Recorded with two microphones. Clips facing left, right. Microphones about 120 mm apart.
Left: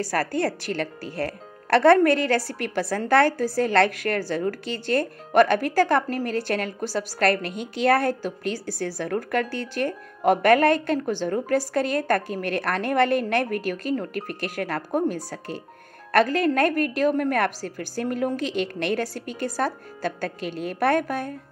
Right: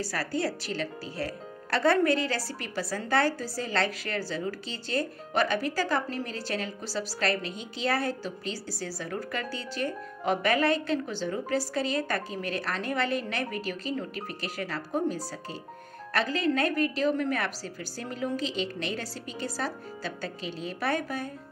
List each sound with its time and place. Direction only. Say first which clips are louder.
0.0 s speech: left 6 dB; 55° left (ahead or behind)